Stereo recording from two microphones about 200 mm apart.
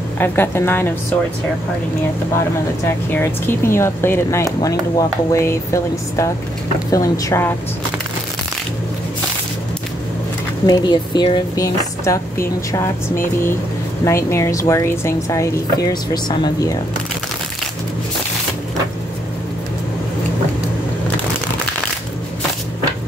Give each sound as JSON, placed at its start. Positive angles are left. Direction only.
{"t": 0.2, "sound": "speech", "side_deg": 10}
{"t": 3.1, "sound": "speech", "side_deg": 10}
{"t": 10.7, "sound": "speech", "side_deg": 20}